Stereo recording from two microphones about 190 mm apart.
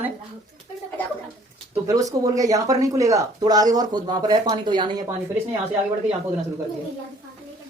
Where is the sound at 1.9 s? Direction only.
20° right (ahead or behind).